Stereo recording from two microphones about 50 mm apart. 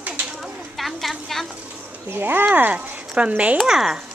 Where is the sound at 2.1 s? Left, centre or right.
Right.